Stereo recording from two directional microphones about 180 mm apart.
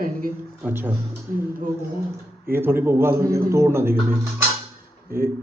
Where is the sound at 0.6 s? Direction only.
10° right (ahead or behind).